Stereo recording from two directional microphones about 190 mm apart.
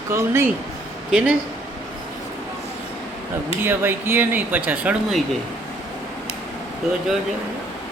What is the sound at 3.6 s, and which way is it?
Speech, 10° right (ahead or behind).